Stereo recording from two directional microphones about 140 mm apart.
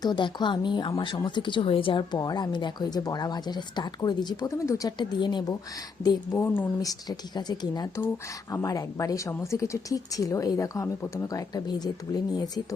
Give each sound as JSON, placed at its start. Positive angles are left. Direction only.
{"t": 0.0, "sound": "speech", "side_deg": 30}
{"t": 6.3, "sound": "speech", "side_deg": 15}
{"t": 7.1, "sound": "speech", "side_deg": 30}